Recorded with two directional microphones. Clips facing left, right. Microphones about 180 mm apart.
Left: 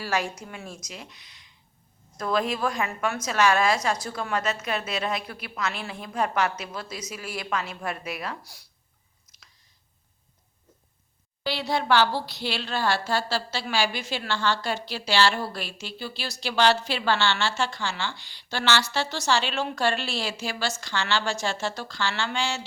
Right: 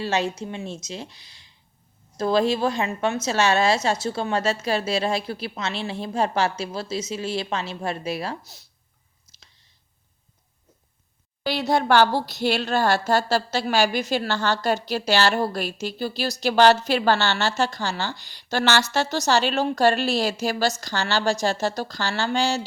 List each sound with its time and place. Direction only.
0.0 s a woman's voice: 25° right (ahead or behind)
9.3 s a sound: 30° right (ahead or behind)
11.4 s a woman's voice: 45° right (ahead or behind)